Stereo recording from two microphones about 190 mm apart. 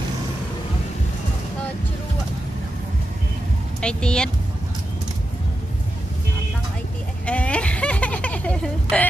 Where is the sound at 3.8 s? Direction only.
5° left (ahead or behind).